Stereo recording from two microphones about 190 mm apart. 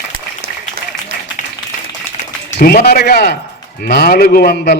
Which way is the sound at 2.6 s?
55° left (ahead or behind).